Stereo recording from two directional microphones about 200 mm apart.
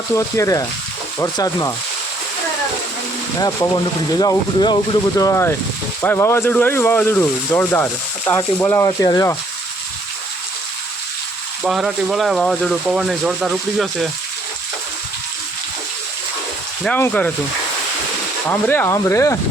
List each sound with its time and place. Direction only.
0.1 s speech: 15° left (ahead or behind)
4.2 s speech: 20° left (ahead or behind)
11.6 s speech: centre (ahead or behind)
16.8 s speech: 5° left (ahead or behind)
18.4 s speech: 10° left (ahead or behind)